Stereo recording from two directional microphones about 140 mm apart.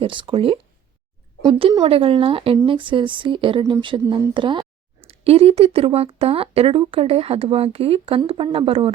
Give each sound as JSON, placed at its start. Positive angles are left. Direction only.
{"t": 0.0, "sound": "speech", "side_deg": -35}